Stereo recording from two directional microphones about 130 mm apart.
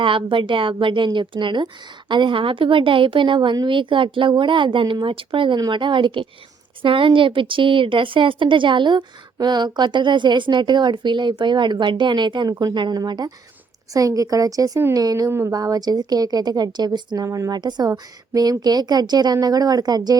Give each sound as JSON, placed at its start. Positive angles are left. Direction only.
{"t": 0.0, "sound": "a woman's voice", "side_deg": -40}